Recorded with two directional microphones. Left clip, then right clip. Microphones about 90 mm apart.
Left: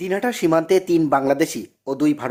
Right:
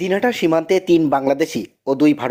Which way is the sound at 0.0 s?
20° right (ahead or behind).